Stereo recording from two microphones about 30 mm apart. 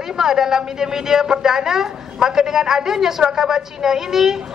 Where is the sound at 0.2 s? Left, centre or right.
Centre.